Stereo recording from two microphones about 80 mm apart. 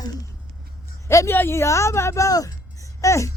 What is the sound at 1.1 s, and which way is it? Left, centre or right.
A woman's voice, left.